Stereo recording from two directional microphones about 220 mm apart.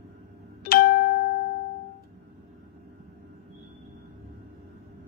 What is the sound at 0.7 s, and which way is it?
Music, 45° left (ahead or behind).